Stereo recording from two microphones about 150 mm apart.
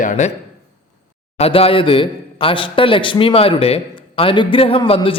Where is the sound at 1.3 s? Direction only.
40° left (ahead or behind).